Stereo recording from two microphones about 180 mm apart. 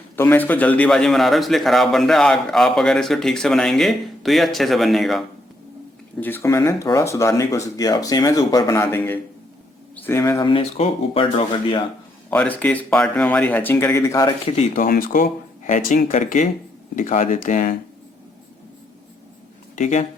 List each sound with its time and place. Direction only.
0.2 s a man's voice: 10° left (ahead or behind)
6.1 s speech: 10° left (ahead or behind)
10.4 s speech: 30° left (ahead or behind)
12.3 s speech: 10° left (ahead or behind)
14.5 s speech: 35° left (ahead or behind)
14.8 s speech: 50° left (ahead or behind)
19.7 s speech: 45° left (ahead or behind)